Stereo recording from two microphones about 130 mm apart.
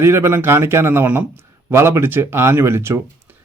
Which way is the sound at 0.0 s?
20° right (ahead or behind).